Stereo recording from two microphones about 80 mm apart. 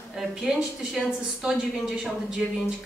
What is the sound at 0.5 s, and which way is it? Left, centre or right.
A woman's voice, centre.